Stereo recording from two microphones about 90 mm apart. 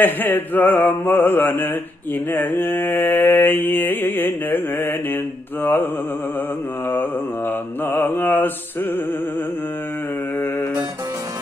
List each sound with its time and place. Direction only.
0.0 s mantra: 20° left (ahead or behind)
7.8 s mantra: 25° left (ahead or behind)